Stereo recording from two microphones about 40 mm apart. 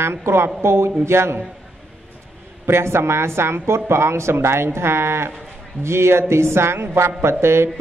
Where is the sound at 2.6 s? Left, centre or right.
Right.